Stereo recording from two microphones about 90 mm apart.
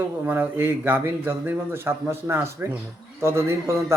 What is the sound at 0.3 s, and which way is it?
A man's voice, 25° right (ahead or behind).